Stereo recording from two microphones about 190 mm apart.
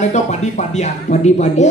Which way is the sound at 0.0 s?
35° left (ahead or behind).